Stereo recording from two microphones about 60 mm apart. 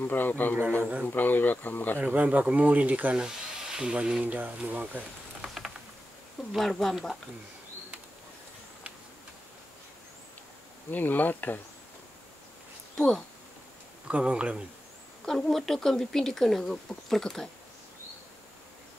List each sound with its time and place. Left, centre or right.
0.0 s speech: left
2.0 s speech: right
3.2 s a sound: centre
4.2 s speech: right
5.4 s a sound: centre
6.5 s speech: centre
10.9 s speech: left
12.9 s speech: centre
14.0 s speech: right
15.2 s speech: centre